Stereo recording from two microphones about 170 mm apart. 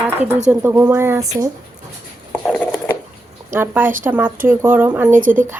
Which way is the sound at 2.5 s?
10° left (ahead or behind).